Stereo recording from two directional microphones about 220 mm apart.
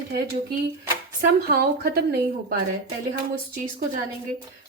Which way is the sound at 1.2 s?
45° right (ahead or behind).